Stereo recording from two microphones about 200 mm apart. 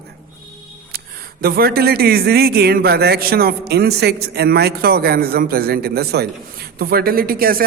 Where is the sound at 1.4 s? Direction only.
50° right (ahead or behind).